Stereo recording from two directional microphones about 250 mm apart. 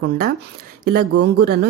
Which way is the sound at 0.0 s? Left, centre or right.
Right.